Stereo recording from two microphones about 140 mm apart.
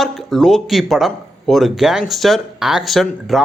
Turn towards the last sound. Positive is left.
turn(degrees=0)  # may be behind; listen again after turning